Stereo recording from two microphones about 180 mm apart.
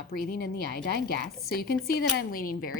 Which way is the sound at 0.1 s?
60° left (ahead or behind).